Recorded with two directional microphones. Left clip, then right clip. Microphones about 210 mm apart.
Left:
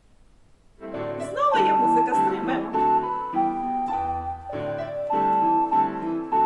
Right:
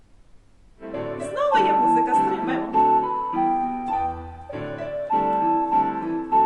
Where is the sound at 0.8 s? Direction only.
30° right (ahead or behind).